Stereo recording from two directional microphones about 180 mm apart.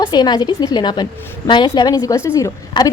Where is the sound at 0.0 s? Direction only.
25° left (ahead or behind).